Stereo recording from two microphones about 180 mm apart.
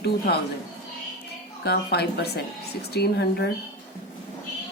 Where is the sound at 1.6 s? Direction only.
65° left (ahead or behind).